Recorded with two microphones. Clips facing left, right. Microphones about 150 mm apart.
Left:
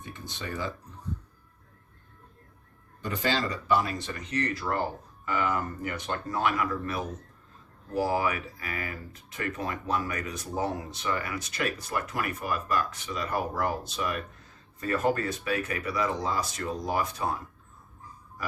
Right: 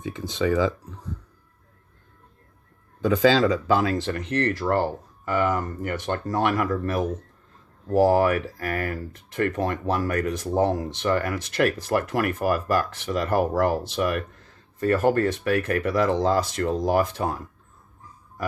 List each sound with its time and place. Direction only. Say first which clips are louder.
0.0 s speech: right 14 dB; 90° right
3.4 s speech: right 6 dB; 90° right; by 4.9 s 65° right (ahead or behind)
5.4 s speech: right 5 dB; 45° right (ahead or behind); by 17.0 s 80° right
17.2 s speech: right 4 dB; 55° right (ahead or behind)